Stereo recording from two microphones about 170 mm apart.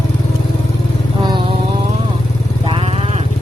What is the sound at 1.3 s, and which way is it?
Vehicle, 30° right (ahead or behind).